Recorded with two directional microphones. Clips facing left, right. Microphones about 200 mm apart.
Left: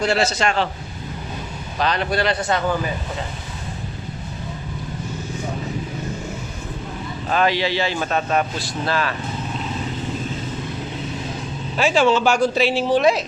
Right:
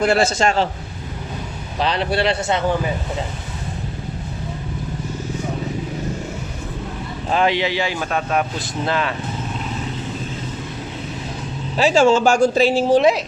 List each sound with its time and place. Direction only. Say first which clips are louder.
0.0 s speech: right 3 dB; 50° right (ahead or behind)
1.8 s a man's voice: right 1 dB; 30° right (ahead or behind)
7.3 s speech: right 1 dB; 20° right (ahead or behind); by 8.4 s 5° right (ahead or behind)
8.5 s a man's voice: right 1 dB; 20° right (ahead or behind)
11.8 s speech: right 3 dB; 40° right (ahead or behind)
13.0 s a man's voice: right 2 dB; 20° right (ahead or behind)